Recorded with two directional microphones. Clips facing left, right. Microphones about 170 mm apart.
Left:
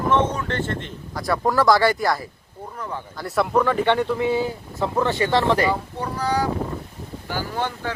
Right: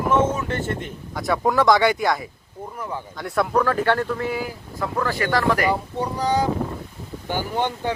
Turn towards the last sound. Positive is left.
turn(degrees=-20)  # may be behind; listen again after turning